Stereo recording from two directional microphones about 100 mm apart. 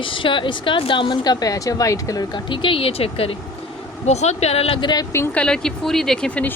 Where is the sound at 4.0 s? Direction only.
90° left.